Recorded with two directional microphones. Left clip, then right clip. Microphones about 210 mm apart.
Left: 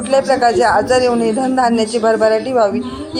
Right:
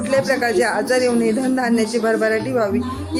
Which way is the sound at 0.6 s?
15° right (ahead or behind).